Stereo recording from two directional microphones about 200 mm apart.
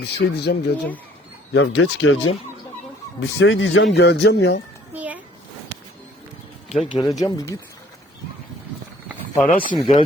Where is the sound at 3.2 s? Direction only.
65° left (ahead or behind).